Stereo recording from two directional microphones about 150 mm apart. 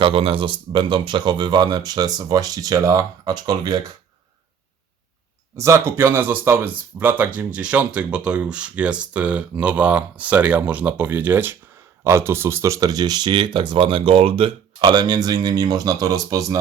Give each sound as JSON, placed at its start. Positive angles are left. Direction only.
{"t": 0.0, "sound": "speech", "side_deg": -40}
{"t": 5.5, "sound": "speech", "side_deg": -20}